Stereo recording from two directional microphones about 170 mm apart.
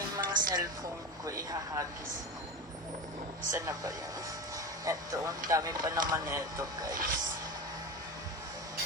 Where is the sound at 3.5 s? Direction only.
20° right (ahead or behind).